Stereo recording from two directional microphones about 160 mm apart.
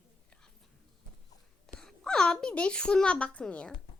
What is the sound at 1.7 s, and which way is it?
A woman's voice, 5° left (ahead or behind).